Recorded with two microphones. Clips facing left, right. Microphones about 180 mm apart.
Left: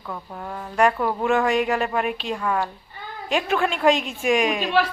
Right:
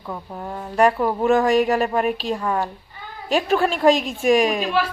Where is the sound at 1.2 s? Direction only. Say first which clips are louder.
Right 4 dB; 35° right (ahead or behind).